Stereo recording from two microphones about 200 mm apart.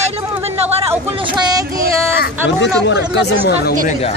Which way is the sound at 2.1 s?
60° left (ahead or behind).